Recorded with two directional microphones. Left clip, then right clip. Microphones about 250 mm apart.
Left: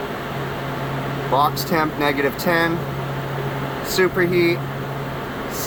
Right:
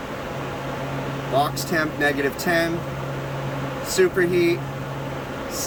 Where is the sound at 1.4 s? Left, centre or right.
Centre.